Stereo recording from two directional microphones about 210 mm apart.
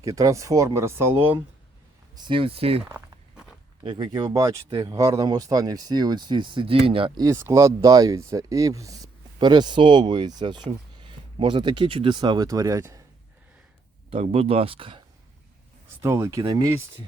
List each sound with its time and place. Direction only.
0.0 s speech: 15° right (ahead or behind)
2.1 s speech: 20° right (ahead or behind)
3.8 s speech: 20° right (ahead or behind)
14.1 s speech: 30° right (ahead or behind)
16.0 s speech: 15° right (ahead or behind)